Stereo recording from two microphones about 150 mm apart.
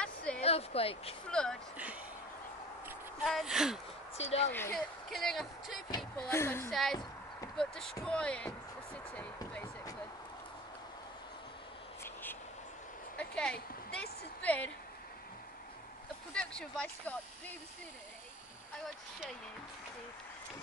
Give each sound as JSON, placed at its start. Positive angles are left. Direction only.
{"t": 0.0, "sound": "a sound", "side_deg": 5}
{"t": 0.4, "sound": "speech", "side_deg": 45}
{"t": 1.3, "sound": "speech", "side_deg": 5}
{"t": 3.3, "sound": "speech", "side_deg": 0}
{"t": 4.2, "sound": "a woman's voice", "side_deg": 45}
{"t": 4.5, "sound": "speech", "side_deg": 15}
{"t": 4.7, "sound": "speech", "side_deg": 0}
{"t": 6.1, "sound": "speech", "side_deg": 15}
{"t": 6.7, "sound": "speech", "side_deg": 0}
{"t": 12.0, "sound": "a sound", "side_deg": 15}
{"t": 14.4, "sound": "speech", "side_deg": 10}
{"t": 16.3, "sound": "speech", "side_deg": 5}